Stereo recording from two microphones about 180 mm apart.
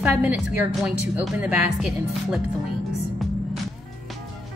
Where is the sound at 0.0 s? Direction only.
10° right (ahead or behind).